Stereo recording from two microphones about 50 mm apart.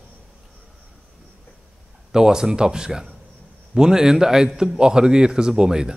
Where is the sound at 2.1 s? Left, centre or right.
Centre.